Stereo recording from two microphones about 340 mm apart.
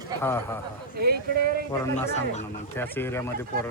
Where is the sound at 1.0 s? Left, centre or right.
Right.